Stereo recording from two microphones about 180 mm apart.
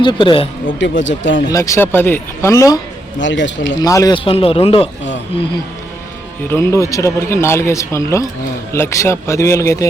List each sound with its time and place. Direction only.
0.0 s a man's voice: 25° left (ahead or behind)
0.8 s speech: 90° left
1.5 s speech: 15° left (ahead or behind)
3.2 s speech: 90° left
3.8 s a man's voice: 20° left (ahead or behind)
6.5 s speech: 15° left (ahead or behind)